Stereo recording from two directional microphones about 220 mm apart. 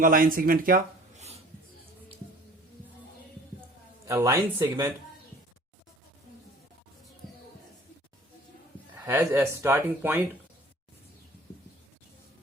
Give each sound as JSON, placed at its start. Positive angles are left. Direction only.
{"t": 0.0, "sound": "speech", "side_deg": -40}
{"t": 4.0, "sound": "speech", "side_deg": -15}
{"t": 9.0, "sound": "speech", "side_deg": -10}